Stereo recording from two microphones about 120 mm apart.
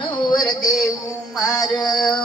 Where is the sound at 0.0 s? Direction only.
35° left (ahead or behind).